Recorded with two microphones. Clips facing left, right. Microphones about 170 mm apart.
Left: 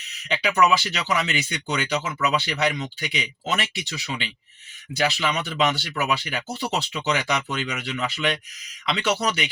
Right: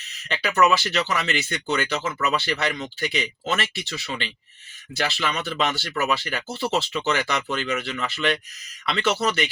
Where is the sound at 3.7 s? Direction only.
15° left (ahead or behind).